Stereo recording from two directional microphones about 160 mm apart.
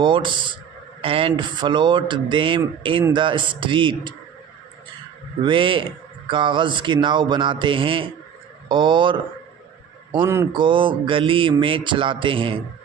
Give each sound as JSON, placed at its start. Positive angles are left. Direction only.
{"t": 0.0, "sound": "mantra", "side_deg": -30}
{"t": 5.4, "sound": "mantra", "side_deg": -30}
{"t": 10.2, "sound": "speech", "side_deg": -15}
{"t": 10.5, "sound": "mantra", "side_deg": -30}